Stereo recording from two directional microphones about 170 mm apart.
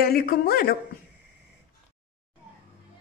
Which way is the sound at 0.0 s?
60° left (ahead or behind).